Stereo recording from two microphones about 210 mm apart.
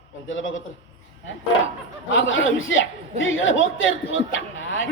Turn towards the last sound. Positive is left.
turn(degrees=65)  # may be behind; listen again after turning